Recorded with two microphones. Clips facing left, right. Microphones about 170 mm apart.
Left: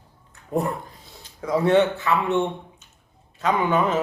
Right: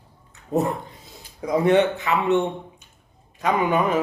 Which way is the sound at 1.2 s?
15° right (ahead or behind).